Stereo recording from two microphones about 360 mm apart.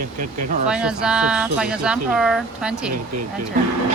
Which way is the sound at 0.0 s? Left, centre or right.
Right.